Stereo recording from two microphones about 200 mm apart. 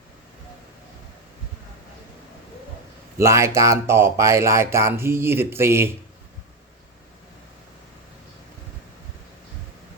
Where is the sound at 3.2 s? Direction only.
15° right (ahead or behind).